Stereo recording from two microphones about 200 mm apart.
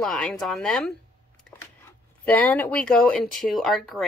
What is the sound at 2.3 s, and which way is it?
Speech, 10° left (ahead or behind).